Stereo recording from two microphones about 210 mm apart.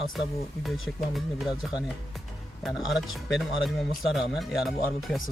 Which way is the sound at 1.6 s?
Centre (ahead or behind).